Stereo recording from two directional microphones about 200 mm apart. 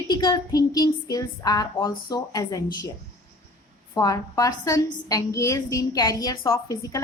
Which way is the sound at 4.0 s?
20° left (ahead or behind).